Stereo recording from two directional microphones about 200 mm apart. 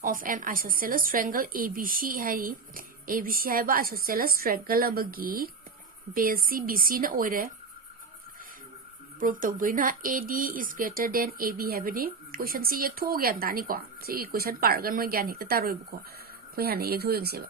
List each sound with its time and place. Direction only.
0.0 s speech: 45° right (ahead or behind)
9.2 s speech: 45° right (ahead or behind)